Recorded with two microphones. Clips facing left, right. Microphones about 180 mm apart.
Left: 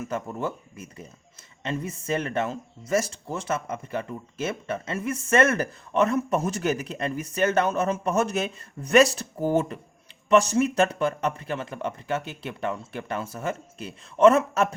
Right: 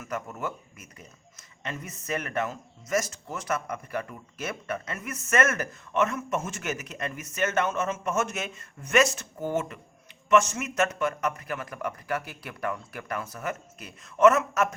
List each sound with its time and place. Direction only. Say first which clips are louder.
0.0 s speech: left 4 dB; 30° left (ahead or behind)